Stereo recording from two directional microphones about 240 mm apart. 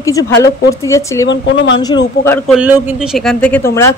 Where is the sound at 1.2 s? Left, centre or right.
Left.